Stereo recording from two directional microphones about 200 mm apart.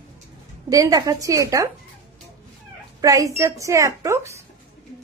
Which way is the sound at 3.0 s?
15° right (ahead or behind).